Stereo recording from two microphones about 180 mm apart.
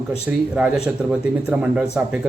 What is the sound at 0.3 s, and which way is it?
A man's voice, 5° right (ahead or behind).